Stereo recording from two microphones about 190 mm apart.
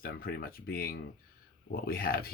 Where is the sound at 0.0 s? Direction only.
50° left (ahead or behind).